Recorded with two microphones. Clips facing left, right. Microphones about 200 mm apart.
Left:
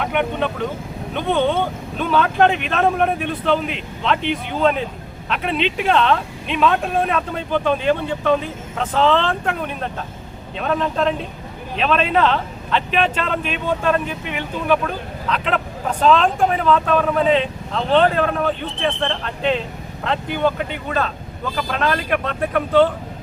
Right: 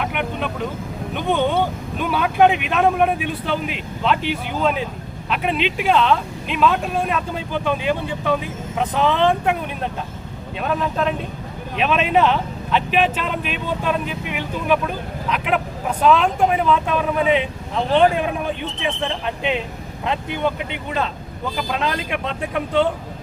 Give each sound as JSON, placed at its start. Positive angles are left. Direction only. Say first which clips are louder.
{"t": 0.0, "sound": "speech", "louder": "left 4 dB", "side_deg": -5}